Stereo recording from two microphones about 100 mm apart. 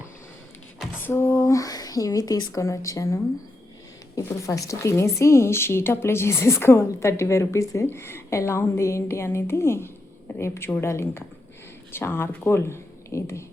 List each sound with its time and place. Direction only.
1.0 s a woman's voice: 25° left (ahead or behind)